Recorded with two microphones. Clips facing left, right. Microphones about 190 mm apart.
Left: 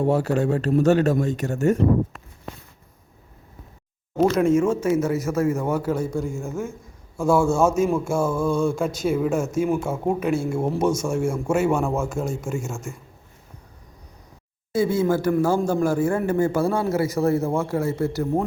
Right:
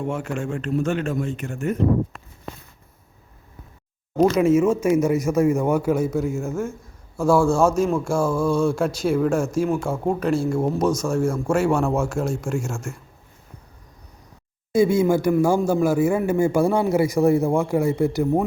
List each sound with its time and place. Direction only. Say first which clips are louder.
0.0 s a man's voice: left 6 dB; 35° left (ahead or behind)
4.2 s speech: right 2 dB; centre (ahead or behind)
14.7 s speech: right 3 dB; 15° right (ahead or behind)